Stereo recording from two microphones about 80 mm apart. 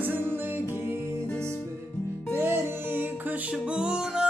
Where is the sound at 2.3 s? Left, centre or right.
Right.